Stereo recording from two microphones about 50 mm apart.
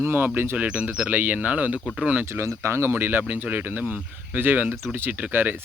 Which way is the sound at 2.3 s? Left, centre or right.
Right.